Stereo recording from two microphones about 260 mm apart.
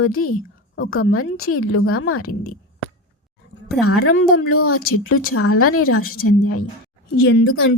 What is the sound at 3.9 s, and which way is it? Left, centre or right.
A woman's voice, left.